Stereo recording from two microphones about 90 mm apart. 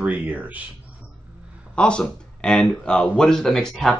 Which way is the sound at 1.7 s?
10° left (ahead or behind).